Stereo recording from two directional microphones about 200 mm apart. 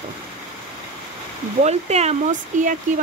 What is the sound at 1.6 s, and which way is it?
Speech, 35° right (ahead or behind).